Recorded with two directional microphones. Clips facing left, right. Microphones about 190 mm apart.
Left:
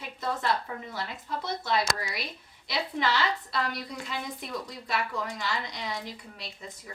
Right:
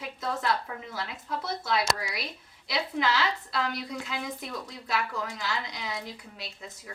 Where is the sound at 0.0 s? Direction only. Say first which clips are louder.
Even; centre (ahead or behind).